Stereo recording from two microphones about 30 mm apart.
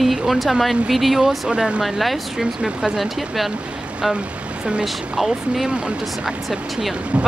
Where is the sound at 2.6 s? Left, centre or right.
Centre.